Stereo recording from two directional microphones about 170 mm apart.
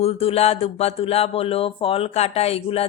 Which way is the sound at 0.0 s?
35° left (ahead or behind).